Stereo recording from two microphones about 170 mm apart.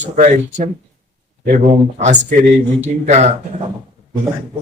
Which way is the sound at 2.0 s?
45° right (ahead or behind).